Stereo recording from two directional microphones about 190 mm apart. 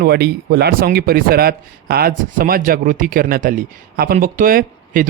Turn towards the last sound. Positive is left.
turn(degrees=-45)  # may be behind; listen again after turning